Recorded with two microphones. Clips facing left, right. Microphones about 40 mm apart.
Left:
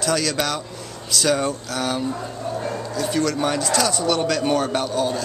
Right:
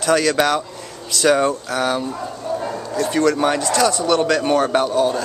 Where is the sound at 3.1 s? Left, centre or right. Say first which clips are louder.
Right 5 dB; centre.